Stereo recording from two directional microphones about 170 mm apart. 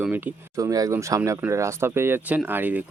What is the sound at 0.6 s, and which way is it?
Speech, 20° right (ahead or behind).